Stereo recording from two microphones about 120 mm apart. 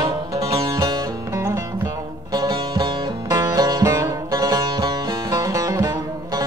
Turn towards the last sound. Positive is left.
turn(degrees=-30)  # may be behind; listen again after turning